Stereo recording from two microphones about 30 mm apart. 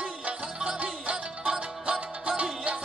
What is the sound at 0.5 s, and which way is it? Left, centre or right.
Music, right.